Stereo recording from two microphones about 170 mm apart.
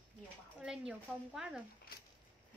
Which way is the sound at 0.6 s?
5° right (ahead or behind).